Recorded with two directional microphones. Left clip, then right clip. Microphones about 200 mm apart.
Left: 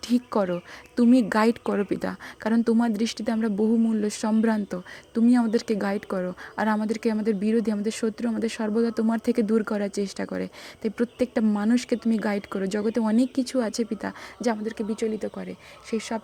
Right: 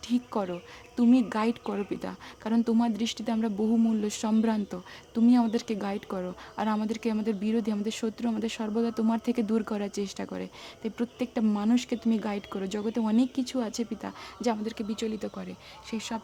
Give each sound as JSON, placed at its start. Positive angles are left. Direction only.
{"t": 0.0, "sound": "speech", "side_deg": 25}